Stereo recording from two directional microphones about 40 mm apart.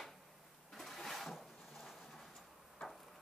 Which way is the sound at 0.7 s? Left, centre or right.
Centre.